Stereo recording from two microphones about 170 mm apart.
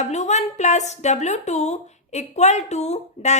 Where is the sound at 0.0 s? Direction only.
40° left (ahead or behind).